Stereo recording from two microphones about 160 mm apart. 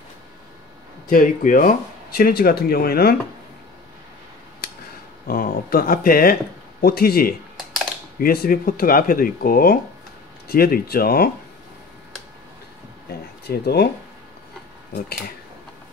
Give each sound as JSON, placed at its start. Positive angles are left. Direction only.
{"t": 1.1, "sound": "speech", "side_deg": 55}
{"t": 5.3, "sound": "speech", "side_deg": 65}
{"t": 13.5, "sound": "speech", "side_deg": 80}